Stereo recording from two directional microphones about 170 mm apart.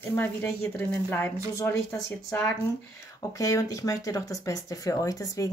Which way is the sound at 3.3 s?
20° left (ahead or behind).